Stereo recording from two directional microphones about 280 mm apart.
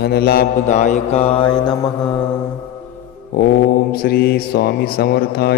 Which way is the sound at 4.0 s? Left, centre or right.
Left.